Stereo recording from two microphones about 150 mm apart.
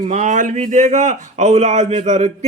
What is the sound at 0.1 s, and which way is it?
A man's voice, 55° right (ahead or behind).